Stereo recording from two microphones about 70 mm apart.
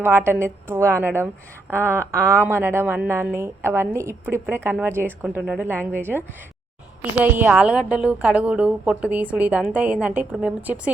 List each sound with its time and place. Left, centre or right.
0.0 s a woman's voice: right
7.5 s a woman's voice: centre